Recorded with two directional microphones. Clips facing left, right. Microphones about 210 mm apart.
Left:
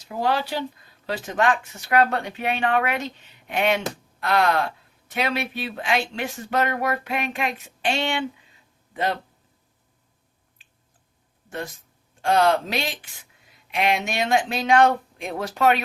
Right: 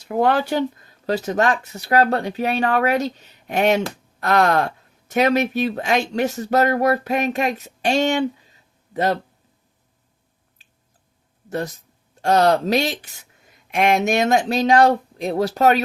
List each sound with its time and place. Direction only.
0.0 s speech: 55° right (ahead or behind); by 9.1 s 40° right (ahead or behind)
11.4 s speech: 40° right (ahead or behind)